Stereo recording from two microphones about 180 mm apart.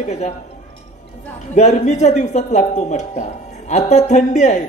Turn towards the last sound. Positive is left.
turn(degrees=40)  # may be behind; listen again after turning